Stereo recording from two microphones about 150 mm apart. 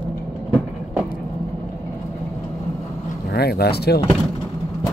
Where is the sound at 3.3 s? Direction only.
90° left.